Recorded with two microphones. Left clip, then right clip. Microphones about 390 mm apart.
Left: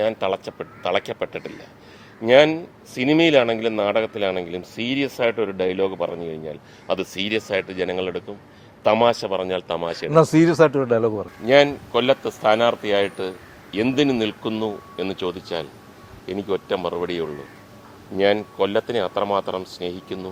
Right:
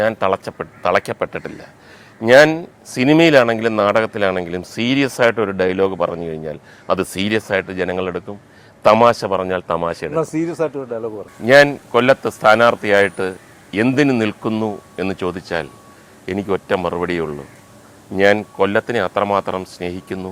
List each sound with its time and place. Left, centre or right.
0.0 s speech: right
10.2 s speech: left
11.4 s speech: right